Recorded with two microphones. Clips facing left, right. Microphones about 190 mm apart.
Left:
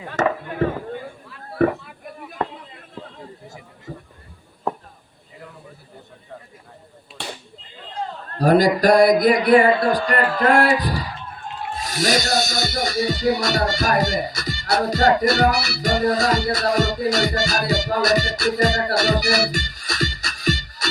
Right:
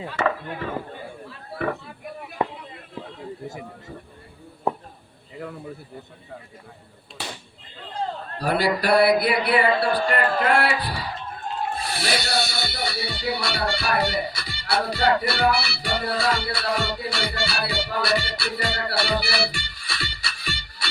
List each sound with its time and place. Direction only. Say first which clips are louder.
0.1 s speech: left 4 dB; 50° left (ahead or behind)
1.6 s music: left 8 dB; 40° left (ahead or behind)
2.4 s a sound: even; 10° right (ahead or behind)
8.4 s music: left 8 dB; 45° left (ahead or behind)